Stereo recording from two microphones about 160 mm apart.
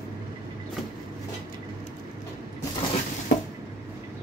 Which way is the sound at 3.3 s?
75° left (ahead or behind).